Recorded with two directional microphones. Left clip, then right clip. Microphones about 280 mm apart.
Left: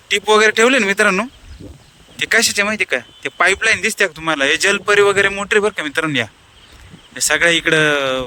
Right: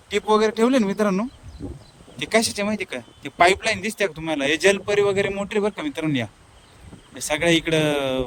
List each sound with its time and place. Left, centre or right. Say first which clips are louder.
0.6 s speech: left 8 dB; centre
2.1 s speech: left 7 dB; centre